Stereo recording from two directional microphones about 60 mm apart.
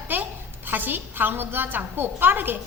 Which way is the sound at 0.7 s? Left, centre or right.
Right.